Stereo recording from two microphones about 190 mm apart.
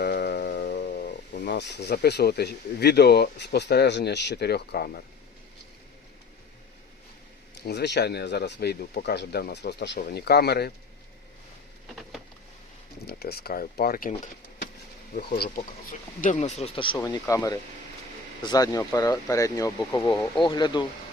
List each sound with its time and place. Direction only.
0.0 s speech: 60° left (ahead or behind)
7.6 s speech: 60° left (ahead or behind)
13.1 s speech: 55° left (ahead or behind)
15.1 s speech: 50° left (ahead or behind); by 20.8 s 25° left (ahead or behind)